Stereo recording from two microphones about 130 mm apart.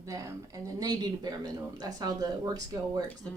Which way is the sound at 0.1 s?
25° right (ahead or behind).